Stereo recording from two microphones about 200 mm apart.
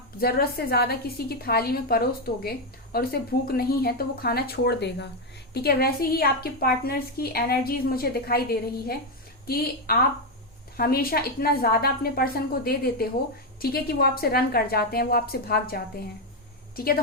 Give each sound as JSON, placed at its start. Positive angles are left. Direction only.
{"t": 0.2, "sound": "a woman's voice", "side_deg": 50}